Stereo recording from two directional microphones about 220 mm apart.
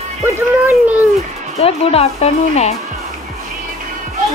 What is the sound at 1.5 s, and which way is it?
Speech, 25° left (ahead or behind).